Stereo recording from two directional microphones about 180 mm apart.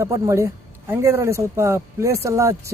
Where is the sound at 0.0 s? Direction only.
15° right (ahead or behind).